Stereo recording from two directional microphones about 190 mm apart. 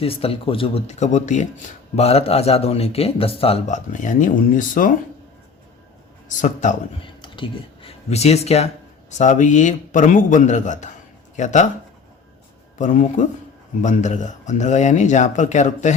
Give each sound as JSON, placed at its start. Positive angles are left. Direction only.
{"t": 0.0, "sound": "a man's voice", "side_deg": 30}
{"t": 6.4, "sound": "a man's voice", "side_deg": 40}
{"t": 7.0, "sound": "a man's voice", "side_deg": 25}
{"t": 12.8, "sound": "a man's voice", "side_deg": 40}